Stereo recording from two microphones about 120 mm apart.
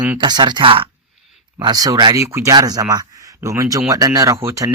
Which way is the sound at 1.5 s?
35° right (ahead or behind).